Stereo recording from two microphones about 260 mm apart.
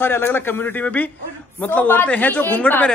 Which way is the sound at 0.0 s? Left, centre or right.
Centre.